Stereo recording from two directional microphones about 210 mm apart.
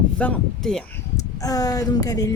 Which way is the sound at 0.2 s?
5° left (ahead or behind).